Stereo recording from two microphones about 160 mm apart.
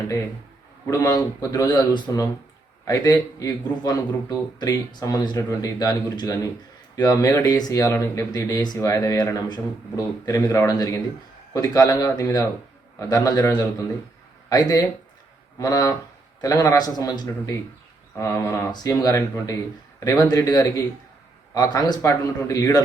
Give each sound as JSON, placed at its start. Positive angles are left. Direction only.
{"t": 0.9, "sound": "speech", "side_deg": 20}